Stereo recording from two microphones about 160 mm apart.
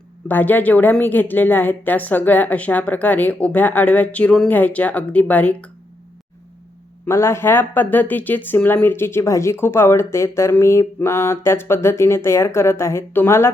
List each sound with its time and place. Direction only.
0.3 s a woman's voice: 10° left (ahead or behind)
7.0 s a woman's voice: 15° left (ahead or behind)